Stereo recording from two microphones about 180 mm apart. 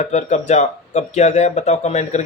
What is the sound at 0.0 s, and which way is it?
Speech, 40° left (ahead or behind).